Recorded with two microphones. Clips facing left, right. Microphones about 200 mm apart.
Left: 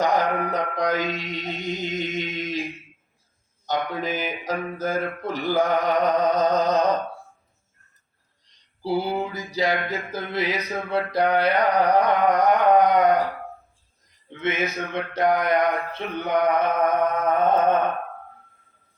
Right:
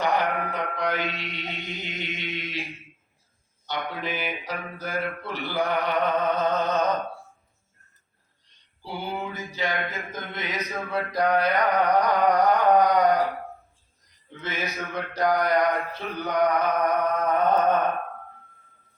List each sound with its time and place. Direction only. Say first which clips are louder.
0.0 s mantra: left 3 dB; 45° left (ahead or behind)
3.7 s mantra: left 5 dB; 45° left (ahead or behind)
8.8 s a sound: left 8 dB; 35° left (ahead or behind)
14.4 s mantra: left 6 dB; 25° left (ahead or behind)